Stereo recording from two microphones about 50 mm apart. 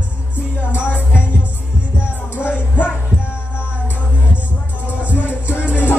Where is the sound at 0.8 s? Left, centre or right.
Left.